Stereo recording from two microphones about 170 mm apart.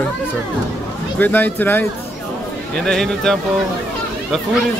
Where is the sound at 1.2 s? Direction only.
10° left (ahead or behind).